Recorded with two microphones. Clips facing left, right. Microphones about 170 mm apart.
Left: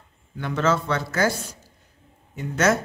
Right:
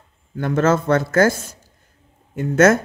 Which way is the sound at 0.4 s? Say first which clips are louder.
Right 5 dB; 50° right (ahead or behind).